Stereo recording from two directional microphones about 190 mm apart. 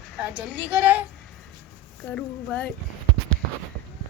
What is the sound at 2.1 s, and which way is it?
Speech, 5° left (ahead or behind).